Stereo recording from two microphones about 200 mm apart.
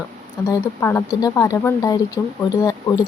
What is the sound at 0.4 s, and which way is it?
Speech, 15° left (ahead or behind).